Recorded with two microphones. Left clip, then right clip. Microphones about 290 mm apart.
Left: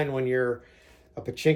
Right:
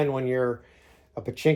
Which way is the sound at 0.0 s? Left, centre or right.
Centre.